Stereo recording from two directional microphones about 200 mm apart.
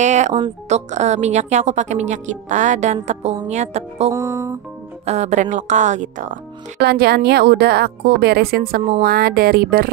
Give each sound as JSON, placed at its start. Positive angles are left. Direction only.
{"t": 0.0, "sound": "a woman's voice", "side_deg": -35}
{"t": 4.1, "sound": "music", "side_deg": -15}
{"t": 5.0, "sound": "a woman's voice", "side_deg": -35}
{"t": 6.8, "sound": "a woman's voice", "side_deg": -55}